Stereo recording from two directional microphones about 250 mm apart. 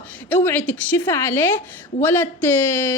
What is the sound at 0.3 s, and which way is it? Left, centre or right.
Speech, centre.